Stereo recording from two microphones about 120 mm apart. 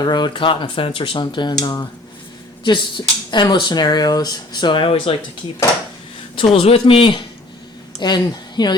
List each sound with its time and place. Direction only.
0.0 s speech: 40° left (ahead or behind)
2.6 s speech: 40° left (ahead or behind)
6.3 s a woman's voice: 50° left (ahead or behind)